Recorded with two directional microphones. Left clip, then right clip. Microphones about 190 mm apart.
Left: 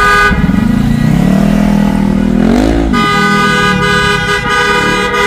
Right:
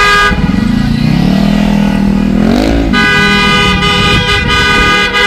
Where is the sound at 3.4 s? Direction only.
75° left (ahead or behind).